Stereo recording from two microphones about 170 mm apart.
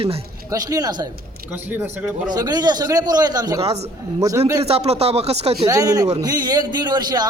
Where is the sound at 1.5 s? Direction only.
10° right (ahead or behind).